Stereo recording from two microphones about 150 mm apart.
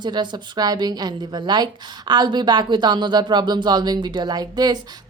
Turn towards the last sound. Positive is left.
turn(degrees=-25)  # may be behind; listen again after turning